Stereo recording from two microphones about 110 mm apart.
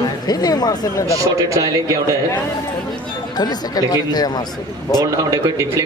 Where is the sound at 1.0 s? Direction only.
30° right (ahead or behind).